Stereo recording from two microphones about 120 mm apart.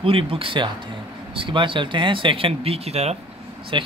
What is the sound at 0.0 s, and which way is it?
Speech, 50° right (ahead or behind).